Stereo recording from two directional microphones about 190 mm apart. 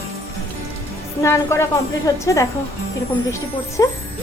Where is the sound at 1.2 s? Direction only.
15° left (ahead or behind).